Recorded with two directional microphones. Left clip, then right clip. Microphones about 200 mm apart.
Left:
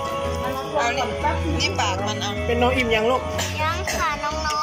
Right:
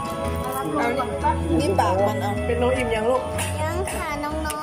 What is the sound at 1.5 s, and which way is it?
Speech, 40° right (ahead or behind).